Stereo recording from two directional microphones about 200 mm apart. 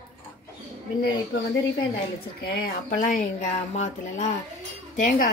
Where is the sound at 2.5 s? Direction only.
45° left (ahead or behind).